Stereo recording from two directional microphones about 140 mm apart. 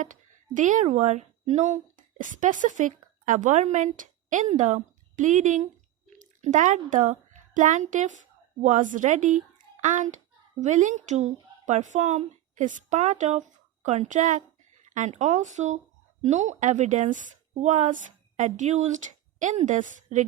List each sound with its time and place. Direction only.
0.0 s a woman's voice: 65° right (ahead or behind)